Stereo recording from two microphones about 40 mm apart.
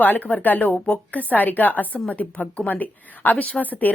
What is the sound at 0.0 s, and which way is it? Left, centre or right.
A woman's voice, left.